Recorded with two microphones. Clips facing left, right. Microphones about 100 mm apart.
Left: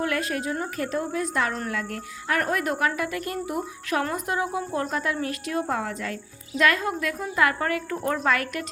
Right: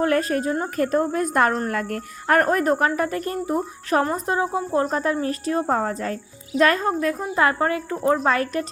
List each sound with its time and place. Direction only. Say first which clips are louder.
0.0 s speech: right 6 dB; 40° right (ahead or behind)